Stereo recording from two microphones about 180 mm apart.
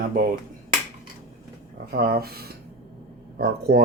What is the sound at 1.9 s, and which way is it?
Speech, 60° right (ahead or behind).